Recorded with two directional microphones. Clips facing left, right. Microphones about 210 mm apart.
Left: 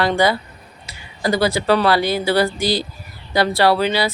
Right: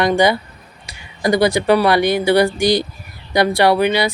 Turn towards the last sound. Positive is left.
turn(degrees=-15)  # may be behind; listen again after turning